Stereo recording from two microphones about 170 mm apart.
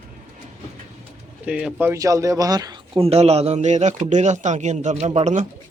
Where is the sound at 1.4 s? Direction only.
5° right (ahead or behind); by 3.0 s 25° right (ahead or behind).